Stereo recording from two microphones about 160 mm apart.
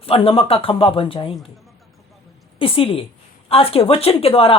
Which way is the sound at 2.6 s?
35° left (ahead or behind).